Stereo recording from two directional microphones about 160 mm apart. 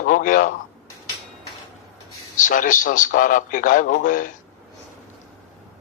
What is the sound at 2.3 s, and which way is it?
Speech, 55° left (ahead or behind).